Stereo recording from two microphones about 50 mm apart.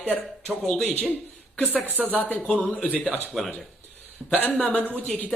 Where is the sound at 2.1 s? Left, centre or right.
Left.